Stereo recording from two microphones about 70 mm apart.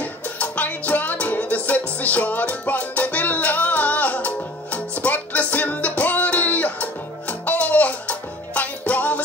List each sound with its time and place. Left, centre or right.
0.0 s music: left